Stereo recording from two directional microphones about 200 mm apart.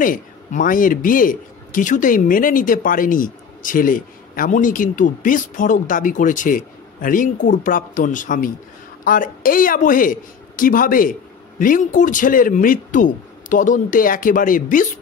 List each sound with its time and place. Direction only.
0.0 s a man's voice: 45° left (ahead or behind)